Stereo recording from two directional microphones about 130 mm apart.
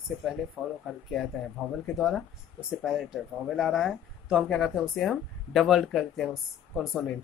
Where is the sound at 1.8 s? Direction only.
5° left (ahead or behind).